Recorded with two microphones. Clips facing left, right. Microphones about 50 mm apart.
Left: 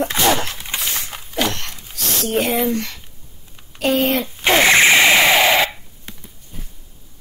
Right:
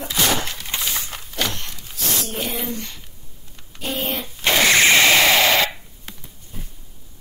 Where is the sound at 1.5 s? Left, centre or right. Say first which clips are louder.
Left 4 dB; left.